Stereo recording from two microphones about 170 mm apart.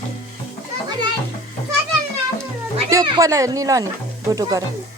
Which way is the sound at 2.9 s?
20° right (ahead or behind).